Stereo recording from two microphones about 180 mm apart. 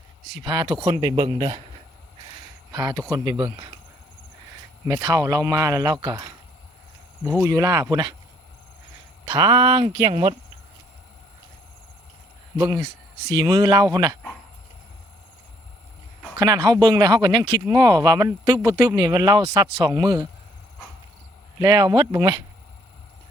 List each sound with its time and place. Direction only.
0.4 s speech: 25° right (ahead or behind)
2.7 s speech: 20° right (ahead or behind)
4.9 s speech: 20° right (ahead or behind)
7.4 s speech: 20° right (ahead or behind)
9.2 s speech: 30° right (ahead or behind)
12.5 s speech: 20° right (ahead or behind)
16.4 s speech: 20° right (ahead or behind)
21.6 s speech: 25° right (ahead or behind)